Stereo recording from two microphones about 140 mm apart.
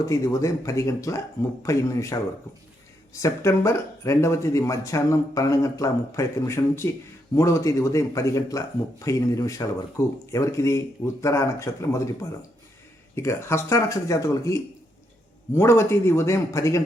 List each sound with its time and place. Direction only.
0.0 s speech: 20° left (ahead or behind)